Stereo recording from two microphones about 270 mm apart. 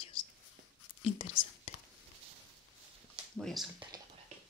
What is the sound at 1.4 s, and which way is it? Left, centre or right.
Speech, left.